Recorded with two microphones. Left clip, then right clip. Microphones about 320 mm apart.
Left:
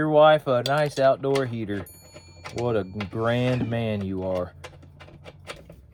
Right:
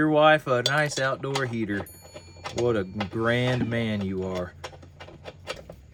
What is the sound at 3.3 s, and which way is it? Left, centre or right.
Speech, centre.